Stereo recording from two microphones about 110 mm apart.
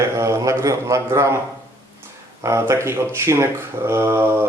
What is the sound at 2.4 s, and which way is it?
Speech, 25° right (ahead or behind).